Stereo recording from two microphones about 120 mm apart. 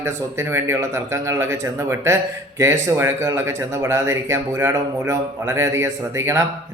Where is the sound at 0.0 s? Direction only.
20° right (ahead or behind).